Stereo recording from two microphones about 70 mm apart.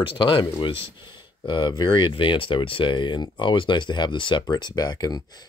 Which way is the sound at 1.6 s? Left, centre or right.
Left.